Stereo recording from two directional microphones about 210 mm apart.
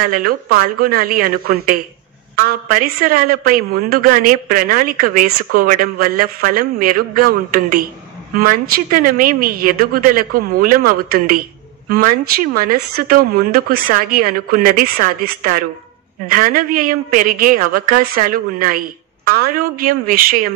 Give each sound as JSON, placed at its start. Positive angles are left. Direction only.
{"t": 0.0, "sound": "a woman's voice", "side_deg": -45}